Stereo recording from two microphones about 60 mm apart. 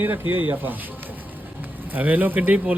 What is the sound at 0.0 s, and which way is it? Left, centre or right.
Speech, right.